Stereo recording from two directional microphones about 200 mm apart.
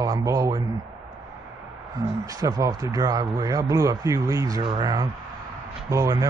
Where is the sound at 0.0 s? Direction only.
15° right (ahead or behind).